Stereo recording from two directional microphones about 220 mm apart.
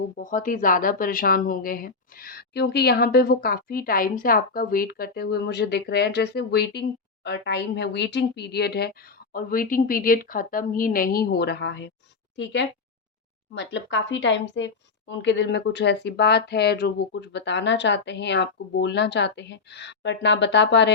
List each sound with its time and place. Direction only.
0.2 s a woman's voice: 35° left (ahead or behind); by 20.9 s 50° left (ahead or behind)